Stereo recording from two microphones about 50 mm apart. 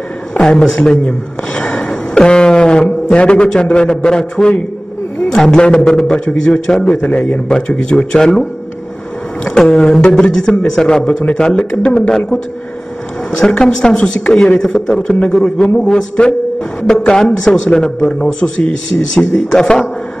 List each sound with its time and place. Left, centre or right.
0.3 s a man's voice: centre
8.1 s a man's voice: centre
13.3 s a man's voice: centre
15.4 s a man's voice: centre